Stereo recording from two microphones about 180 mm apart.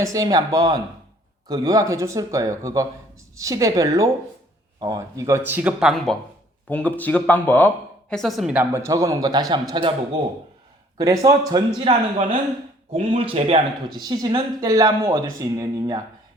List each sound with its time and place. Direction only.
0.0 s speech: 20° right (ahead or behind); by 6.1 s centre (ahead or behind)
6.7 s speech: 10° left (ahead or behind); by 9.9 s 25° right (ahead or behind)
10.9 s speech: 20° right (ahead or behind)
11.8 s speech: 40° right (ahead or behind); by 16.0 s 20° right (ahead or behind)